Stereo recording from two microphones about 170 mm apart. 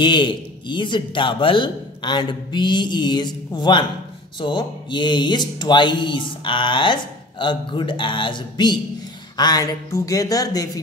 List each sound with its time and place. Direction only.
0.0 s speech: 30° left (ahead or behind)